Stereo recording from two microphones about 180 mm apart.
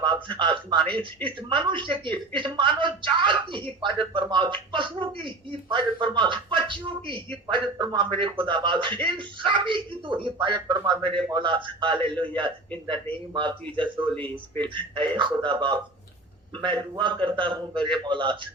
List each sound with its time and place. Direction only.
0.0 s speech: 25° right (ahead or behind)
12.1 s a man's voice: 10° left (ahead or behind)
13.3 s speech: 25° right (ahead or behind)